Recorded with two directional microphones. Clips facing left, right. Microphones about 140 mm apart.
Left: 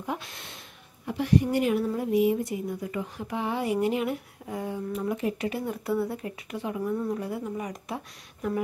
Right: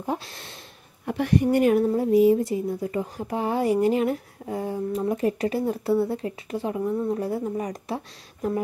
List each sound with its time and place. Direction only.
0.0 s a woman's voice: 35° right (ahead or behind)
1.0 s a woman's voice: 60° right (ahead or behind)
1.9 s a woman's voice: 35° right (ahead or behind)
7.2 s a woman's voice: 35° right (ahead or behind)